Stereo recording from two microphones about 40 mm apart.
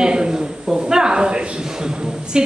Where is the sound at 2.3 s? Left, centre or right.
Right.